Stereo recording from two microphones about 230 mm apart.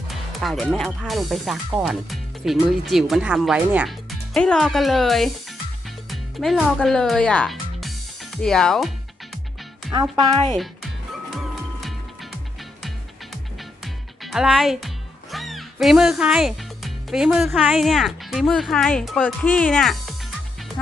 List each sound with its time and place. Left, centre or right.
0.1 s speech: centre
9.9 s speech: centre
10.6 s music: centre
14.2 s speech: centre